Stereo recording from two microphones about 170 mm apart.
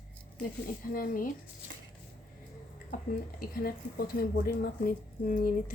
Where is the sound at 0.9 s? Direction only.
55° left (ahead or behind).